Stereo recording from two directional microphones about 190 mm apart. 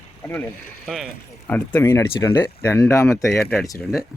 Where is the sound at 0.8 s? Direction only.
Centre (ahead or behind).